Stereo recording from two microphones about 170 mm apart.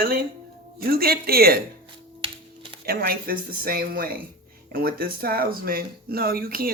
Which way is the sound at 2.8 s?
65° right (ahead or behind).